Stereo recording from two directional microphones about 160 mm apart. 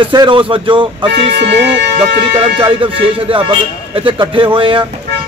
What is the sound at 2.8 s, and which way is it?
Speech, 35° right (ahead or behind).